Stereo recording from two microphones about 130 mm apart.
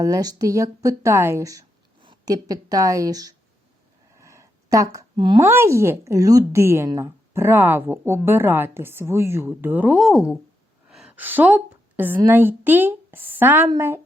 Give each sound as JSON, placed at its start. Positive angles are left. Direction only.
{"t": 0.0, "sound": "speech", "side_deg": -30}
{"t": 4.2, "sound": "a sound", "side_deg": -20}
{"t": 5.1, "sound": "speech", "side_deg": -35}
{"t": 5.4, "sound": "a woman's voice", "side_deg": -20}
{"t": 10.8, "sound": "a sound", "side_deg": -5}
{"t": 12.2, "sound": "a woman's voice", "side_deg": -15}